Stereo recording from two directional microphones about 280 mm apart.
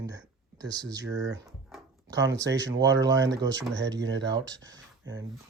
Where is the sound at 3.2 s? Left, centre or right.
Right.